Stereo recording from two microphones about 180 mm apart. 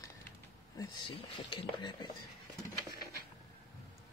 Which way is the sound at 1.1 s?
30° left (ahead or behind).